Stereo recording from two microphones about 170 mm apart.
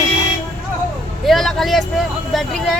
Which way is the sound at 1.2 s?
Centre (ahead or behind).